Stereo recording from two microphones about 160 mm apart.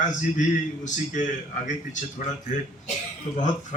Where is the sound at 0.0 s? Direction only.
50° left (ahead or behind).